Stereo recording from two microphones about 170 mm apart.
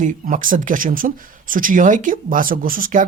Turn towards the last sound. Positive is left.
turn(degrees=-55)  # may be behind; listen again after turning